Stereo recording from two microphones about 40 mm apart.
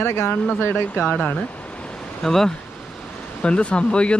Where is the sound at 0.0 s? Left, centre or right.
Left.